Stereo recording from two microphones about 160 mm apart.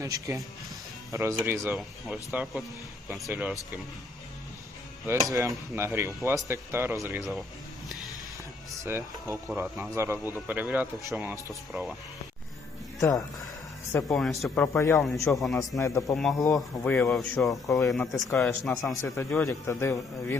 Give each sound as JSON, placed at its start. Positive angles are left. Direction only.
{"t": 0.0, "sound": "speech", "side_deg": -20}
{"t": 1.7, "sound": "speech", "side_deg": -5}
{"t": 5.0, "sound": "speech", "side_deg": -20}
{"t": 7.2, "sound": "speech", "side_deg": 0}
{"t": 8.8, "sound": "speech", "side_deg": -15}
{"t": 13.0, "sound": "speech", "side_deg": 20}
{"t": 14.2, "sound": "speech", "side_deg": 0}
{"t": 14.5, "sound": "speech", "side_deg": 15}
{"t": 14.9, "sound": "speech", "side_deg": 0}
{"t": 15.8, "sound": "speech", "side_deg": 20}
{"t": 16.1, "sound": "speech", "side_deg": 0}
{"t": 19.1, "sound": "speech", "side_deg": 15}